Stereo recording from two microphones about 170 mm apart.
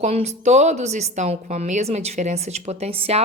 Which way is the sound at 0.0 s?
40° right (ahead or behind).